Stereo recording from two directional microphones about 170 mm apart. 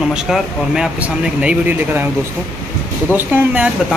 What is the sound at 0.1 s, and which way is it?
Speech, 5° right (ahead or behind).